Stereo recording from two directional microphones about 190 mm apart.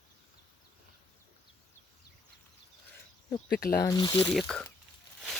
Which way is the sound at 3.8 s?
20° left (ahead or behind).